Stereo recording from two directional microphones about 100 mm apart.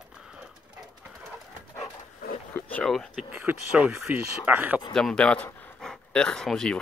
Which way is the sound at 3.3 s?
20° right (ahead or behind).